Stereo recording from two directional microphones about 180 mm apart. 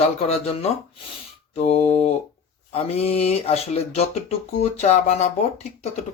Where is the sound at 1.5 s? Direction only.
35° left (ahead or behind).